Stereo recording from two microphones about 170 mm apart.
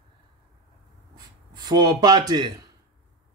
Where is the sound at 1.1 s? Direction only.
25° right (ahead or behind).